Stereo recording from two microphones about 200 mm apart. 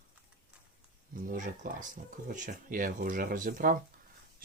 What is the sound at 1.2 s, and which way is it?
Speech, 40° right (ahead or behind).